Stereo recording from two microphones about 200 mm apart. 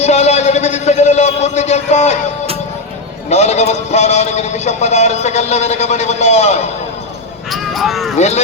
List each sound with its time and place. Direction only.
0.0 s a sound: 35° left (ahead or behind)
3.2 s a man's voice: 35° left (ahead or behind)
7.5 s speech: centre (ahead or behind)